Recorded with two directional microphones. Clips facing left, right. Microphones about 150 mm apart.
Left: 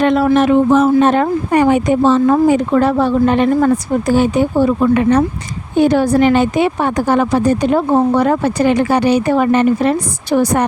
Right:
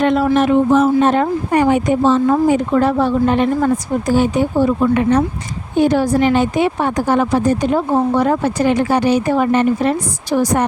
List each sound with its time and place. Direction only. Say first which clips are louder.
0.0 s speech: left 2 dB; 75° left (ahead or behind)
5.8 s speech: left 2 dB; 70° left (ahead or behind); by 9.9 s 90° left
10.3 s speech: left 2 dB; 65° left (ahead or behind)